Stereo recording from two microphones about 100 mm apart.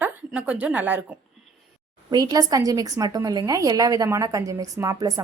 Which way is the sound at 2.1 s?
40° right (ahead or behind).